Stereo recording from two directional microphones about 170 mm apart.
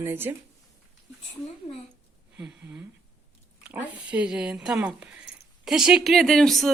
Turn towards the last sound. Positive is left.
turn(degrees=0)  # may be behind; listen again after turning